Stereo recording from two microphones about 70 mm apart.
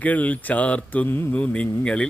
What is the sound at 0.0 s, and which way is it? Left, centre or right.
A man's voice, left.